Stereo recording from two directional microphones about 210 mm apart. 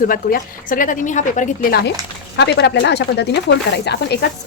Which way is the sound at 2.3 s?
55° left (ahead or behind).